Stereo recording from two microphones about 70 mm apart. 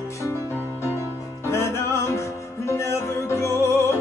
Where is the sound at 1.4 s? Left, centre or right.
Left.